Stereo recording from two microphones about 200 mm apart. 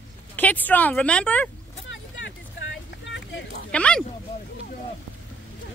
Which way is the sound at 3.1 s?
65° left (ahead or behind).